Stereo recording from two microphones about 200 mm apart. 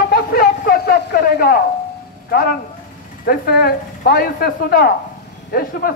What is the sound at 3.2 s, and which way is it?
Speech, 50° left (ahead or behind).